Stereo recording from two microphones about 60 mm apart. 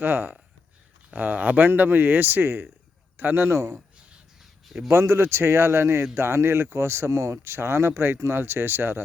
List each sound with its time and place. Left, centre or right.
0.0 s speech: right
3.5 s speech: right
4.6 s speech: centre
4.9 s speech: right